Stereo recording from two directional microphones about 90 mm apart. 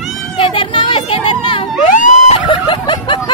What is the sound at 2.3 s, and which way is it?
Snicker, 65° left (ahead or behind).